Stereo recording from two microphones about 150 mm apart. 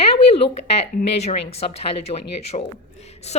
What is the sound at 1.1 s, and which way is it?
A woman's voice, 45° left (ahead or behind).